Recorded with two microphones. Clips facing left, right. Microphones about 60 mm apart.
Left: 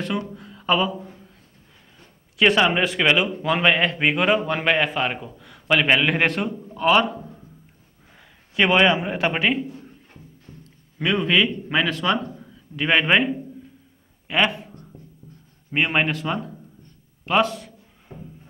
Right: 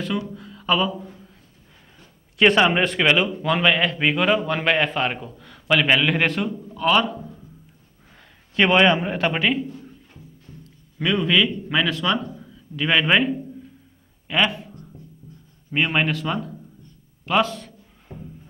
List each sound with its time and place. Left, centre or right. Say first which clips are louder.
0.4 s speech: left 1 dB; left
0.9 s a sound: even; centre
2.8 s a man's voice: right 1 dB; centre
3.3 s speech: even; centre
4.6 s a man's voice: even; centre
6.2 s a man's voice: even; left
8.5 s a man's voice: right 1 dB; centre
9.2 s speech: even; centre
9.8 s a sound: right 1 dB; left
11.0 s speech: even; left
15.7 s speech: even; left
17.6 s a sound: right 1 dB; centre